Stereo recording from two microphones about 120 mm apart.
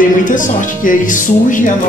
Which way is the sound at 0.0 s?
90° left.